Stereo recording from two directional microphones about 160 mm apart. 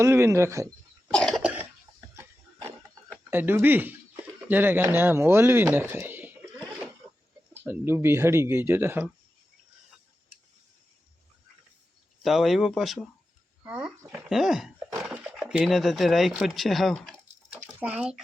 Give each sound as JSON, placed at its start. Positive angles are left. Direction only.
{"t": 0.0, "sound": "speech", "side_deg": -15}
{"t": 1.1, "sound": "cough", "side_deg": 5}
{"t": 1.4, "sound": "cough", "side_deg": -10}
{"t": 1.9, "sound": "a sound", "side_deg": -15}
{"t": 3.2, "sound": "speech", "side_deg": -15}
{"t": 7.5, "sound": "speech", "side_deg": -15}
{"t": 12.2, "sound": "speech", "side_deg": 0}
{"t": 17.7, "sound": "speech", "side_deg": -10}